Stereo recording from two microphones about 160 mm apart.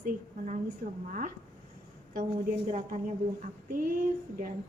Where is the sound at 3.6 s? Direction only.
65° right (ahead or behind).